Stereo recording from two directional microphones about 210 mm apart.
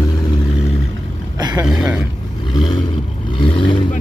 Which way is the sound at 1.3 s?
20° right (ahead or behind).